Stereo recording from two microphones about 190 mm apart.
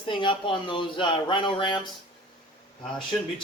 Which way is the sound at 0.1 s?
25° left (ahead or behind).